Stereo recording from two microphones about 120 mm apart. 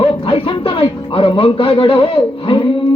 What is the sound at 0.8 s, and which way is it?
Speech, 45° left (ahead or behind).